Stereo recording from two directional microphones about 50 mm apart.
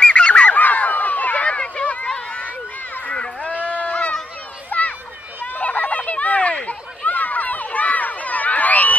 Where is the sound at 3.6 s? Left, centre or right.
Left.